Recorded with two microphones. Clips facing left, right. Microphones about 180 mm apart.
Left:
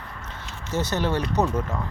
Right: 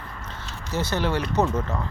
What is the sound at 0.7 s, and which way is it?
Speech, 20° left (ahead or behind).